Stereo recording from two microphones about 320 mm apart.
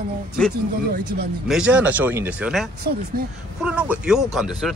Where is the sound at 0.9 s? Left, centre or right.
Right.